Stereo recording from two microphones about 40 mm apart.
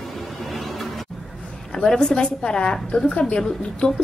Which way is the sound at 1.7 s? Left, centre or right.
Centre.